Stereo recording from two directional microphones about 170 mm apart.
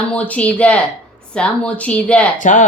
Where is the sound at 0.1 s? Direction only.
5° left (ahead or behind).